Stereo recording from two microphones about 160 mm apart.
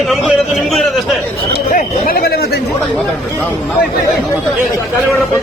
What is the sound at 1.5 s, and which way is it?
Speech, 65° left (ahead or behind).